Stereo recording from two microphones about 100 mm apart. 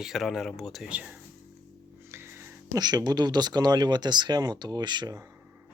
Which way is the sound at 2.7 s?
45° right (ahead or behind).